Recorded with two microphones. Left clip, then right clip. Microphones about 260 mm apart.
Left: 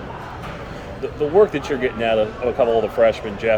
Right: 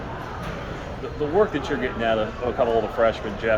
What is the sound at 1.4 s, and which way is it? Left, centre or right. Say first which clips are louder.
Speech: left 6 dB; left.